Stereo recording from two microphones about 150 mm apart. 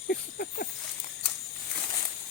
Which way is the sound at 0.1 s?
90° left.